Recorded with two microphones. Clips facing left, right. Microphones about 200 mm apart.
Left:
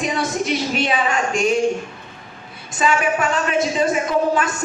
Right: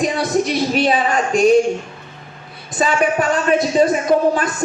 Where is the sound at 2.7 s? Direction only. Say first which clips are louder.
Right 2 dB; 35° right (ahead or behind).